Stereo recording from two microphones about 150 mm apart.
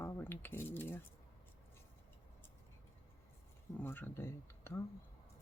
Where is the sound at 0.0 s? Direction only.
15° left (ahead or behind).